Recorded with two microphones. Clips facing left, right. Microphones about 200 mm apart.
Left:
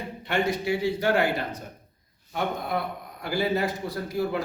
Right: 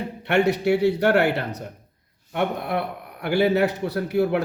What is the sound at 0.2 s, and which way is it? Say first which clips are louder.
A man's voice: right 6 dB; 70° right (ahead or behind).